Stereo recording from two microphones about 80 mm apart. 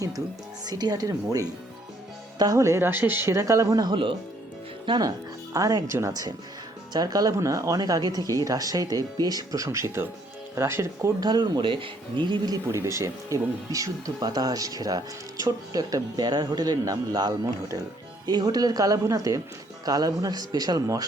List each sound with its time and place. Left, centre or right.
0.6 s speech: right
2.6 s speech: right
3.8 s speech: right
4.9 s speech: right
5.5 s speech: right
11.2 s speech: right
12.6 s speech: right